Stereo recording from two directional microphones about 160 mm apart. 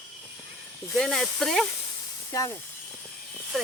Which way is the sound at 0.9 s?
Centre (ahead or behind).